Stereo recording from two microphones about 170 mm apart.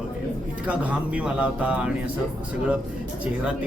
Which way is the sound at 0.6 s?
5° right (ahead or behind).